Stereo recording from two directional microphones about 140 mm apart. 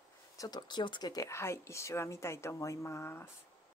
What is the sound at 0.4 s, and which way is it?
Speech, 30° left (ahead or behind).